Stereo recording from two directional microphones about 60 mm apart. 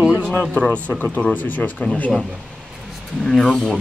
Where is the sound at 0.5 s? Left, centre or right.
Centre.